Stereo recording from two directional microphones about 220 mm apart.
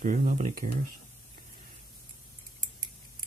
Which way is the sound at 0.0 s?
35° right (ahead or behind).